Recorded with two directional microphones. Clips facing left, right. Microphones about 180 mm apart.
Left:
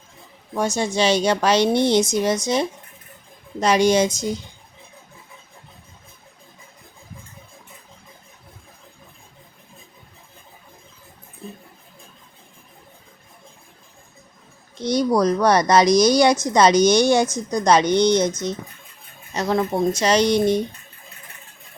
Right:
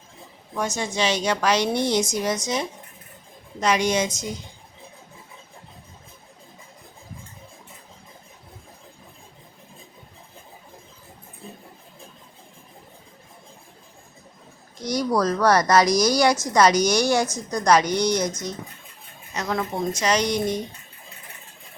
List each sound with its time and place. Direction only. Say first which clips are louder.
0.5 s a woman's voice: left 5 dB; 30° left (ahead or behind)
14.8 s a woman's voice: left 4 dB; 25° left (ahead or behind)
19.3 s speech: left 6 dB; 30° left (ahead or behind)